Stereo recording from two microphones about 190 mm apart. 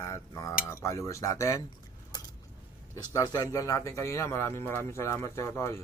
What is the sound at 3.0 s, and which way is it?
Speech, 20° left (ahead or behind).